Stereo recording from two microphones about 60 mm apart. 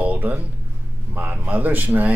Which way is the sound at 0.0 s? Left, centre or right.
Right.